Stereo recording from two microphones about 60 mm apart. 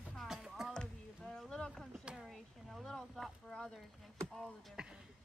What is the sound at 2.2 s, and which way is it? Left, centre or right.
Speech, centre.